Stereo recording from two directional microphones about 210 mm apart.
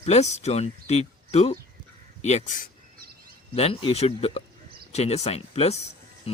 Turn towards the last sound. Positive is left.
turn(degrees=30)  # may be behind; listen again after turning